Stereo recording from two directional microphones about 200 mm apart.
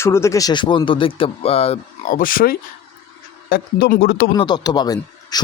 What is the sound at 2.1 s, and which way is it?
Speech, 45° left (ahead or behind).